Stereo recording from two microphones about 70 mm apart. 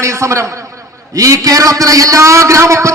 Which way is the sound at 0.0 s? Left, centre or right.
Right.